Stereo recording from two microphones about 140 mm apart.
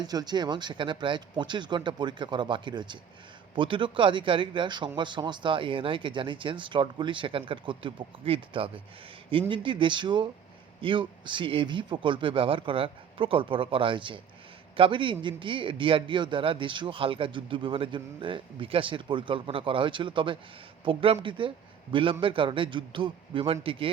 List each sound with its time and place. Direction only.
0.0 s a man's voice: 30° right (ahead or behind)